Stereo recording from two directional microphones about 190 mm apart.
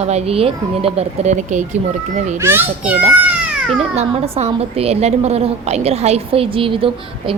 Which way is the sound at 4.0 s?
35° right (ahead or behind).